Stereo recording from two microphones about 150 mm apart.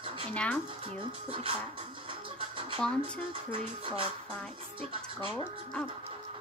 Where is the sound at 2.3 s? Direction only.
35° right (ahead or behind).